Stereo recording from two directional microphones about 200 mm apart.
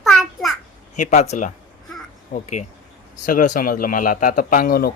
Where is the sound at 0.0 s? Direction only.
Centre (ahead or behind).